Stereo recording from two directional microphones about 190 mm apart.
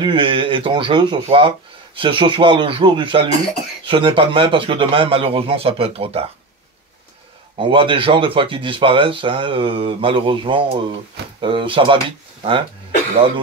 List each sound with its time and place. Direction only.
0.0 s speech: 25° right (ahead or behind)
7.5 s speech: 25° right (ahead or behind)